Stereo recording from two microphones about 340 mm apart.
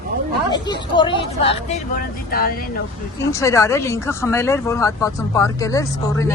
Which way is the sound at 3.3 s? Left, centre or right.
Centre.